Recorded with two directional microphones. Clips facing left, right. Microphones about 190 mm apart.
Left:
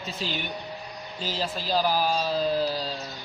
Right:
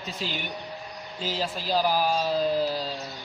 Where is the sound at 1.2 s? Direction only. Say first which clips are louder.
Right 1 dB; 15° right (ahead or behind).